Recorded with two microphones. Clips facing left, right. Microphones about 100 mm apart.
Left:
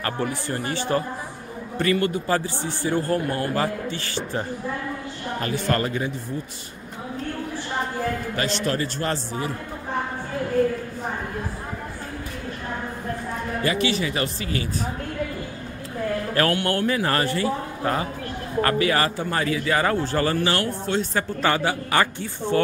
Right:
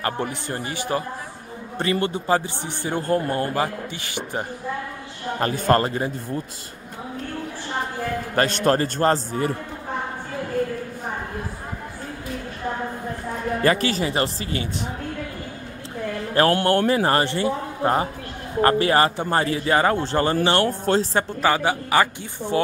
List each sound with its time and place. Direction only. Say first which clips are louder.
0.0 s speech: even; 20° right (ahead or behind)
1.8 s a man's voice: left 1 dB; 25° right (ahead or behind)
3.2 s speech: right 1 dB; 35° right (ahead or behind)
3.5 s speech: even; 15° right (ahead or behind)
5.4 s speech: right 5 dB; 40° right (ahead or behind)
8.4 s a man's voice: right 8 dB; 55° right (ahead or behind)
13.6 s speech: right 2 dB; 45° right (ahead or behind); by 14.9 s 25° right (ahead or behind)
16.5 s a man's voice: right 4 dB; 40° right (ahead or behind)
21.4 s speech: right 1 dB; 15° right (ahead or behind)